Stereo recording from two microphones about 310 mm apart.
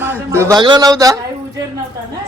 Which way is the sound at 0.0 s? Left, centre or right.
Centre.